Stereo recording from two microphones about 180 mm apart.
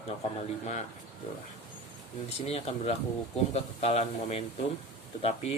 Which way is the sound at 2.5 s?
35° left (ahead or behind).